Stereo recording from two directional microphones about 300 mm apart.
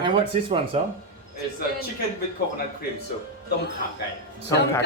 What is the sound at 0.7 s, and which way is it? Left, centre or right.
Speech, centre.